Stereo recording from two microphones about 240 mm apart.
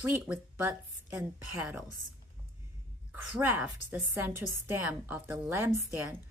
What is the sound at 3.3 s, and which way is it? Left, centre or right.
A woman's voice, centre.